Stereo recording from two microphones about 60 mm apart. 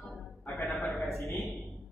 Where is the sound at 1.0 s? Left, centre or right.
Left.